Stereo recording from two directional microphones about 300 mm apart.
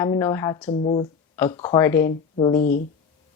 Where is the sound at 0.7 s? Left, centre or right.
Left.